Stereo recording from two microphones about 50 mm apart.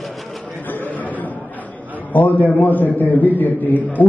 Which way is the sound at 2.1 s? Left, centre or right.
Left.